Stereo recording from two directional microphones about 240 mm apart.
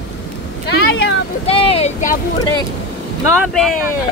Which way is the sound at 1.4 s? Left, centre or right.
Left.